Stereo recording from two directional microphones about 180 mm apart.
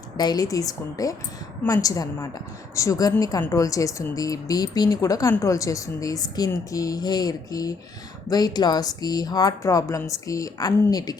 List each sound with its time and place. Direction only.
0.2 s speech: 20° left (ahead or behind)